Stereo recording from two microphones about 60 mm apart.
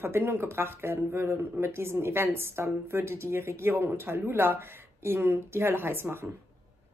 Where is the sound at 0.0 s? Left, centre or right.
Right.